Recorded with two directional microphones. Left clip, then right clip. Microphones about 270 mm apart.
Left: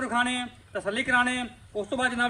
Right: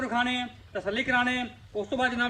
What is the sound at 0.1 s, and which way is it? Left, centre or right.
A man's voice, centre.